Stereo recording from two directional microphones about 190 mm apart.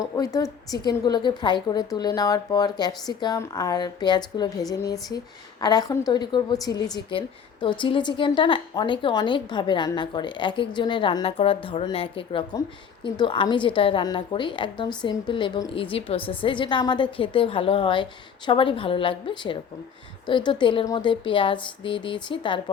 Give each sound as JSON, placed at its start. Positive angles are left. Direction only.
{"t": 0.0, "sound": "a woman's voice", "side_deg": 20}